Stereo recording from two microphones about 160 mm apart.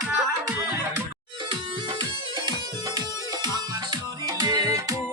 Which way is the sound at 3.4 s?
25° right (ahead or behind).